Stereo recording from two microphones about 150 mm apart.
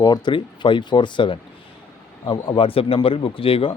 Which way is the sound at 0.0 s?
30° left (ahead or behind).